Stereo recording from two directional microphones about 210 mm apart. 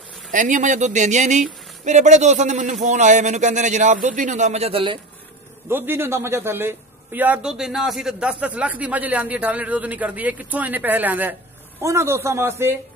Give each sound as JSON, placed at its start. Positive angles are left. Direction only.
{"t": 0.3, "sound": "speech", "side_deg": -35}
{"t": 5.7, "sound": "a man's voice", "side_deg": -10}